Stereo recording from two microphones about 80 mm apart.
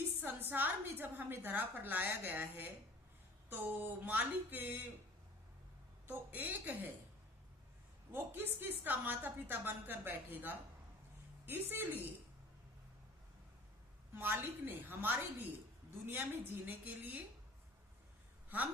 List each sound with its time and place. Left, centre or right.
0.2 s a woman's voice: right
6.1 s a woman's voice: right
8.1 s a woman's voice: right
14.2 s a woman's voice: right
18.4 s a sound: right